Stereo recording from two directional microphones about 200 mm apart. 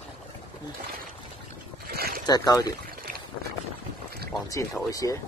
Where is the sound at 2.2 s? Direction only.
20° left (ahead or behind).